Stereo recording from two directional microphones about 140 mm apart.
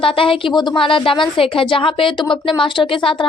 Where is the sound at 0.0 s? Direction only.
40° left (ahead or behind).